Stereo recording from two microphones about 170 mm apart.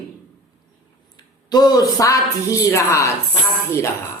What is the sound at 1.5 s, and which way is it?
A man's voice, 25° left (ahead or behind).